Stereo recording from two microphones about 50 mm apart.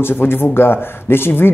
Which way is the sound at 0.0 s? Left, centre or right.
Left.